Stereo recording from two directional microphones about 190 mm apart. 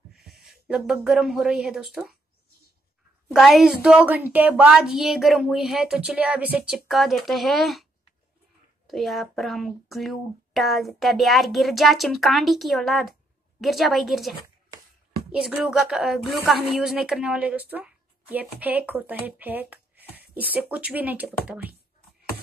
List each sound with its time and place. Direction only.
0.2 s speech: centre (ahead or behind)
3.3 s speech: centre (ahead or behind)
8.8 s speech: centre (ahead or behind)
15.3 s speech: 5° right (ahead or behind)